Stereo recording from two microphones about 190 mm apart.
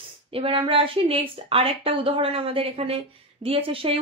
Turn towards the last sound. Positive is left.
turn(degrees=-30)  # may be behind; listen again after turning